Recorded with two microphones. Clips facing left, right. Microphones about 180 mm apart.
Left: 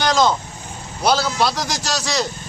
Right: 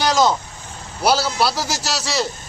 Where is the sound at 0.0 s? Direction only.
10° right (ahead or behind).